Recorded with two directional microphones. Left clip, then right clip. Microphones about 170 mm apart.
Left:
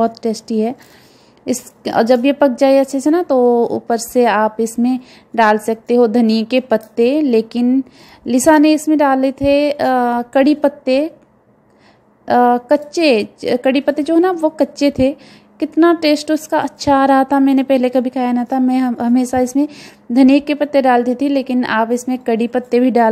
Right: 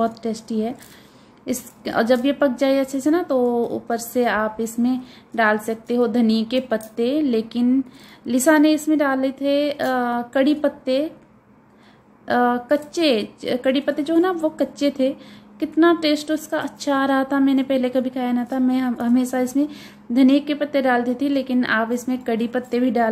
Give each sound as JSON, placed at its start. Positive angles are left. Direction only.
{"t": 0.0, "sound": "a woman's voice", "side_deg": 40}
{"t": 12.3, "sound": "a woman's voice", "side_deg": 35}